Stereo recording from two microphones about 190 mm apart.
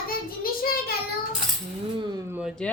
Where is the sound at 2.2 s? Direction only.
10° right (ahead or behind).